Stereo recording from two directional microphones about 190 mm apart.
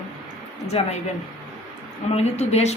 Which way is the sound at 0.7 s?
30° left (ahead or behind).